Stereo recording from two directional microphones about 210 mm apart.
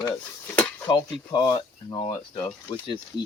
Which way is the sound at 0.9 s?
20° left (ahead or behind).